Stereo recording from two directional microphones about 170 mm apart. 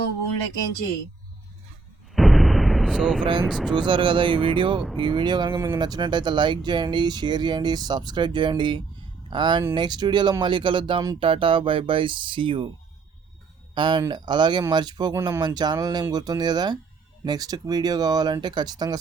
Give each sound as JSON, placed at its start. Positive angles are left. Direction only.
{"t": 2.1, "sound": "artillery fire", "side_deg": 0}
{"t": 3.7, "sound": "speech", "side_deg": -30}
{"t": 13.7, "sound": "speech", "side_deg": -30}